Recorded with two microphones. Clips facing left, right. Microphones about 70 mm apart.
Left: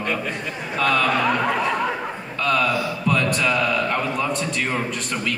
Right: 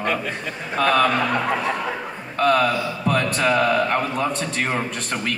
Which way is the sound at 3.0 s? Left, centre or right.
Right.